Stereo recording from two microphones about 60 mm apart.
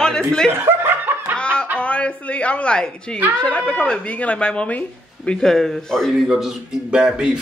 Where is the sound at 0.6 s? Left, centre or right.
Right.